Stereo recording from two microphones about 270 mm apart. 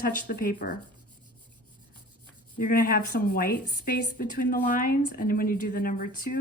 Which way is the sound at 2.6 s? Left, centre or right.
Left.